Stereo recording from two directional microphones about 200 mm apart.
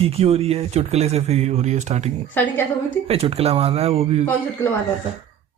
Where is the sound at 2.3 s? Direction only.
10° left (ahead or behind).